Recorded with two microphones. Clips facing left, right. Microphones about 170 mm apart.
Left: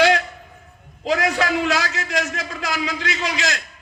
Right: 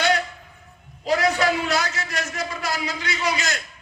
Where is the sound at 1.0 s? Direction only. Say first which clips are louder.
Even; 90° left.